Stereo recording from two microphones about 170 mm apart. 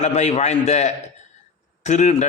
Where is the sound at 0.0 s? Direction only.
40° left (ahead or behind).